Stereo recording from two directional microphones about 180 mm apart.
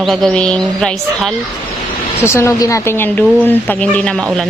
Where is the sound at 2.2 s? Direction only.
15° left (ahead or behind).